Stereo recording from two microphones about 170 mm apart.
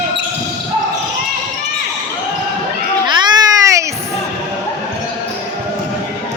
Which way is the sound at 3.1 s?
25° right (ahead or behind).